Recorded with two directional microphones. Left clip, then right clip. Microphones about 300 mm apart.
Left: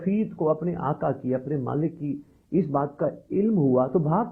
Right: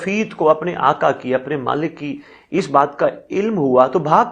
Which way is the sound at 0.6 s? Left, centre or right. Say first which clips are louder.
Right 12 dB; centre.